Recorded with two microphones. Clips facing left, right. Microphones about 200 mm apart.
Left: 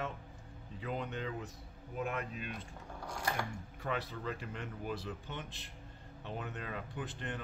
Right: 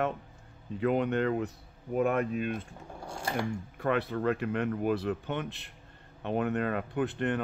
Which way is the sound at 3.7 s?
60° right (ahead or behind).